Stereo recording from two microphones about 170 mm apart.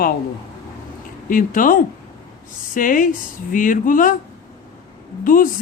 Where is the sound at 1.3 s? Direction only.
50° left (ahead or behind).